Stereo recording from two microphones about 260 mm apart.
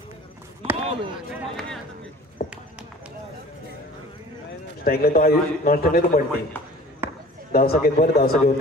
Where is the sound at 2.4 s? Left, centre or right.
Left.